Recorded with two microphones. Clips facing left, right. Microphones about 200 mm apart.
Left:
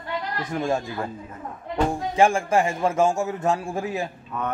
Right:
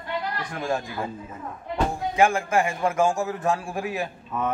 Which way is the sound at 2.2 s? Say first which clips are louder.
Left 2 dB; 30° left (ahead or behind).